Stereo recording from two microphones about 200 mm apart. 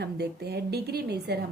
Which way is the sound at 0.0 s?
55° right (ahead or behind).